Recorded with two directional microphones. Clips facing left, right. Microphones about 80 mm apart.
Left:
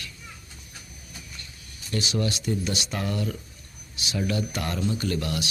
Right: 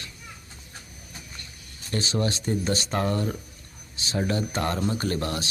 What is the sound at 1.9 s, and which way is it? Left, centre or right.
Speech, right.